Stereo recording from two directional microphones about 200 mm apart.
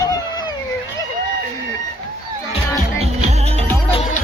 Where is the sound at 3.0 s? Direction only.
30° right (ahead or behind).